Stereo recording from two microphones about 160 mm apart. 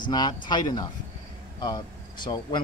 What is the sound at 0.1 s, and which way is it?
Speech, 25° left (ahead or behind).